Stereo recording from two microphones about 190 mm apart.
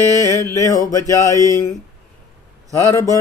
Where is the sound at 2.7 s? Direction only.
15° left (ahead or behind).